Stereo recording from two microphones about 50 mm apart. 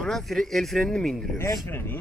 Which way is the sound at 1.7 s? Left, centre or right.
Left.